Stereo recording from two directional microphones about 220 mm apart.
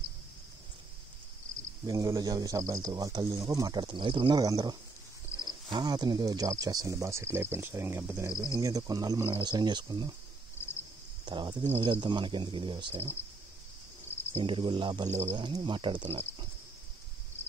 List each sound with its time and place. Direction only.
1.9 s speech: 15° right (ahead or behind)
11.2 s speech: 20° right (ahead or behind)
14.3 s speech: 20° right (ahead or behind)